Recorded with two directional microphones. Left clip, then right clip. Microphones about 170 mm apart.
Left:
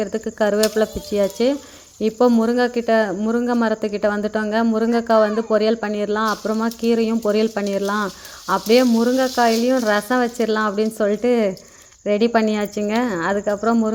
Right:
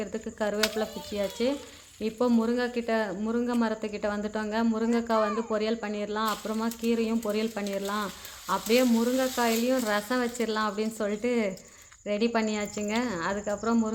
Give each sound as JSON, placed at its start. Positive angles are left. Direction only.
{"t": 0.0, "sound": "speech", "side_deg": 35}